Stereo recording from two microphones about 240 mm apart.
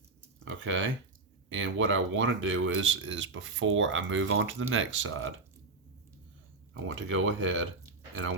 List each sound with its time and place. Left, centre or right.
0.4 s speech: right
6.8 s speech: right